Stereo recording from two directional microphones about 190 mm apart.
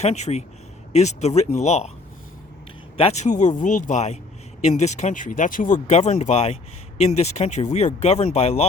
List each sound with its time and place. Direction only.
0.0 s speech: 35° left (ahead or behind)
3.0 s speech: 35° left (ahead or behind)